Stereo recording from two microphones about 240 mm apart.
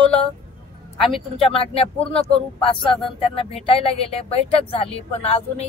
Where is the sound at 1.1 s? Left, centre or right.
Left.